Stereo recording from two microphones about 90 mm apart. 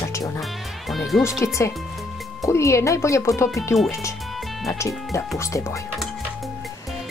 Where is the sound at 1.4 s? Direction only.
35° left (ahead or behind).